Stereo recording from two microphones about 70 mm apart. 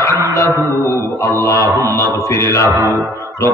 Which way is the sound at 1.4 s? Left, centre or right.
Left.